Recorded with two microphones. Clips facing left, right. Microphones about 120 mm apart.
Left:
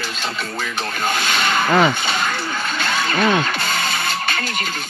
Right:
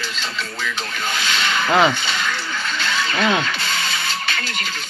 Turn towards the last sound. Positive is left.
turn(degrees=45)  # may be behind; listen again after turning